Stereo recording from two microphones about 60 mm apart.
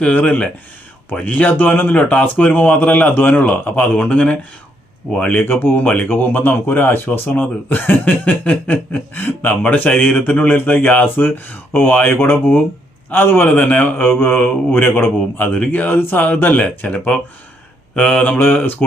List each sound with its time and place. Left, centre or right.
0.0 s speech: left
5.3 s speech: left
18.3 s speech: left